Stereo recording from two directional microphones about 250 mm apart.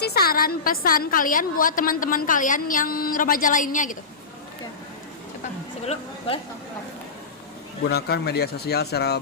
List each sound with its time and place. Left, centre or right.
0.0 s a woman's voice: left
5.8 s speech: left
7.9 s a woman's voice: left